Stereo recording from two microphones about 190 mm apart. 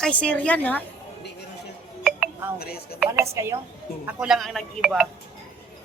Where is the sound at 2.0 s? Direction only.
5° right (ahead or behind).